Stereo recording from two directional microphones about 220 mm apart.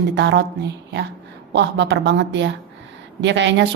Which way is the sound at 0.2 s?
50° right (ahead or behind).